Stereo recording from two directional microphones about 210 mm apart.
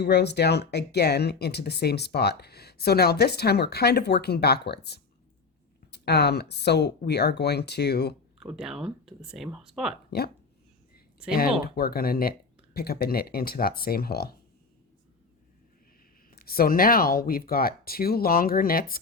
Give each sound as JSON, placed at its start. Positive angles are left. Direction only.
{"t": 0.0, "sound": "speech", "side_deg": 50}
{"t": 8.4, "sound": "speech", "side_deg": -5}
{"t": 10.1, "sound": "speech", "side_deg": 50}
{"t": 11.3, "sound": "speech", "side_deg": 45}
{"t": 16.3, "sound": "speech", "side_deg": 45}